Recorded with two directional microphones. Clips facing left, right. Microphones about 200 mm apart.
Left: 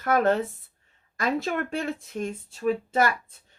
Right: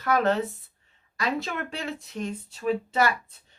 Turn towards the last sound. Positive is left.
turn(degrees=50)  # may be behind; listen again after turning